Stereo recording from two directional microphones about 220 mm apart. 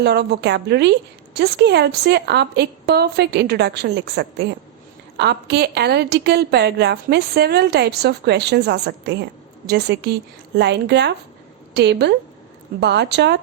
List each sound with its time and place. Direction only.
0.0 s a woman's voice: 50° right (ahead or behind)